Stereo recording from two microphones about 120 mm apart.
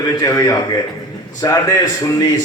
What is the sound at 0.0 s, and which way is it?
A man's voice, 30° left (ahead or behind).